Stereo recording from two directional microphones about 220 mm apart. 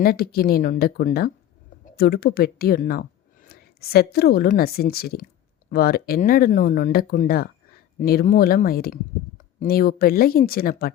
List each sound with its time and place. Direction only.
0.0 s a woman's voice: 45° left (ahead or behind)